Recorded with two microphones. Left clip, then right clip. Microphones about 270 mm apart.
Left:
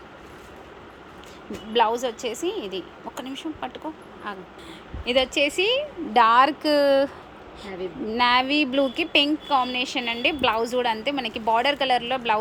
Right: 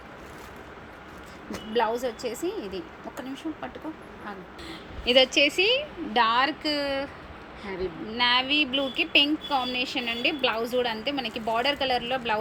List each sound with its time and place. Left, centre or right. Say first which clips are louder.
1.7 s speech: left 4 dB; centre
2.6 s a woman's voice: left 4 dB; left
3.2 s speech: left 3 dB; centre
5.0 s speech: right 1 dB; centre